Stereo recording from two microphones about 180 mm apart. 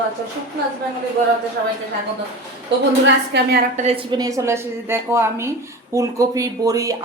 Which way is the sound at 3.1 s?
65° right (ahead or behind).